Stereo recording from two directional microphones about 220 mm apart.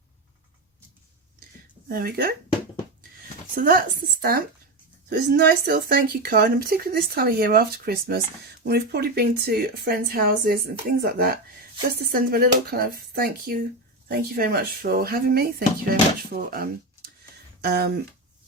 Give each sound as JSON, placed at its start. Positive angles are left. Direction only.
{"t": 1.9, "sound": "speech", "side_deg": -40}
{"t": 3.5, "sound": "a woman's voice", "side_deg": -40}